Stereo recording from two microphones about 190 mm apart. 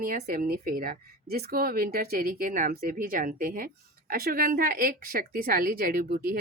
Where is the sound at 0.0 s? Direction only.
50° right (ahead or behind).